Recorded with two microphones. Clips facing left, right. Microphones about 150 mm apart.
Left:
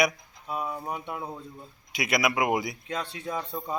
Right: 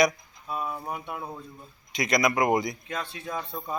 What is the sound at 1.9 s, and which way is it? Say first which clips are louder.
Speech: right 2 dB; 5° left (ahead or behind).